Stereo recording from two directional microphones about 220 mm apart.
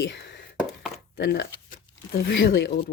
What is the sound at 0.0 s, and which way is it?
Speech, 50° left (ahead or behind).